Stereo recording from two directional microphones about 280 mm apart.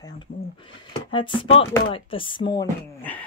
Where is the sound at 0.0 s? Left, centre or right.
Centre.